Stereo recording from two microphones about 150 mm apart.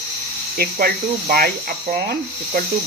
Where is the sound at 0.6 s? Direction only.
80° right.